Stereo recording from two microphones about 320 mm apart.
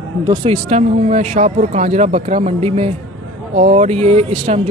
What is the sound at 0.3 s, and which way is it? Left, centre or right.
A woman's voice, centre.